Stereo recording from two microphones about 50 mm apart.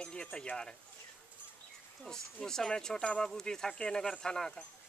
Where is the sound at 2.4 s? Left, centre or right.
Centre.